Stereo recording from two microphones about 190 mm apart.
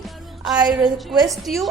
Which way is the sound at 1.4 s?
Centre (ahead or behind).